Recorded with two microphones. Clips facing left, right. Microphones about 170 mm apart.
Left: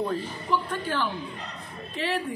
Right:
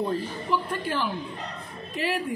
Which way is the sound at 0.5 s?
10° right (ahead or behind).